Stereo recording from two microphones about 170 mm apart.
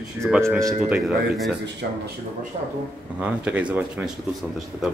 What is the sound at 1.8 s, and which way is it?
Speech, 70° right (ahead or behind).